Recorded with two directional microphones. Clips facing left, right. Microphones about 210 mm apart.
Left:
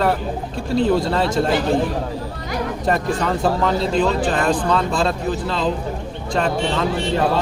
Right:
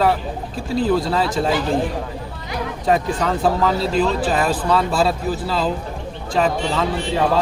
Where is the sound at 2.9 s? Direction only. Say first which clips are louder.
Right 2 dB; centre (ahead or behind).